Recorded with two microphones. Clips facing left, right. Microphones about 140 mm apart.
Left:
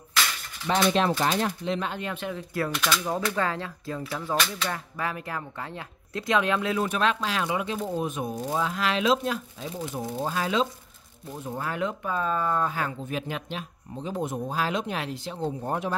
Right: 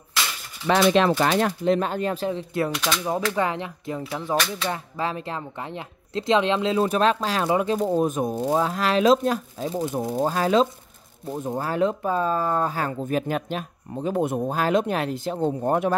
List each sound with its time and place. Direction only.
0.7 s speech: 90° right; by 2.7 s 25° right (ahead or behind)
2.7 s speech: 10° right (ahead or behind); by 15.9 s 50° right (ahead or behind)